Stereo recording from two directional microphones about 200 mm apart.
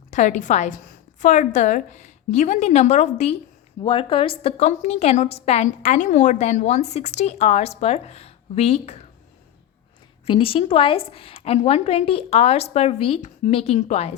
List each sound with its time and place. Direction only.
0.1 s a woman's voice: 35° left (ahead or behind)
10.2 s a woman's voice: 25° left (ahead or behind)